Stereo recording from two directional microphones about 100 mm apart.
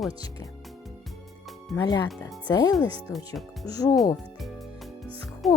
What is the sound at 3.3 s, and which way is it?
Speech, 40° left (ahead or behind).